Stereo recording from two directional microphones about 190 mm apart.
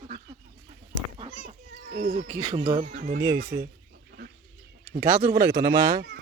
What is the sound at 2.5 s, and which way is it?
Speech, 25° right (ahead or behind).